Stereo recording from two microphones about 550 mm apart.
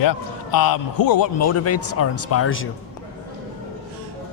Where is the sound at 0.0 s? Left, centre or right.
Left.